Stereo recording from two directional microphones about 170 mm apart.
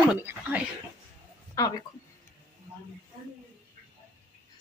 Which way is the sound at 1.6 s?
20° left (ahead or behind).